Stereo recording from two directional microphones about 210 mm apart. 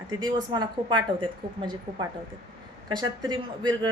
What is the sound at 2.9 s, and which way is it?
Speech, 20° right (ahead or behind).